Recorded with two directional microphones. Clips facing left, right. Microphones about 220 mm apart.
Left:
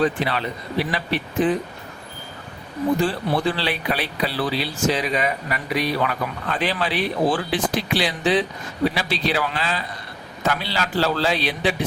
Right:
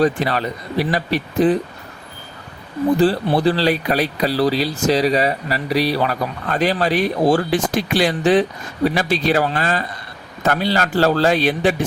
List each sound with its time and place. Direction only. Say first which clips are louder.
0.0 s speech: right 4 dB; 45° right (ahead or behind)
3.0 s speech: right 6 dB; 35° right (ahead or behind)